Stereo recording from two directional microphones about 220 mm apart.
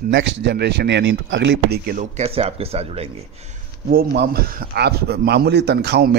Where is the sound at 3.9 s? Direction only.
40° right (ahead or behind).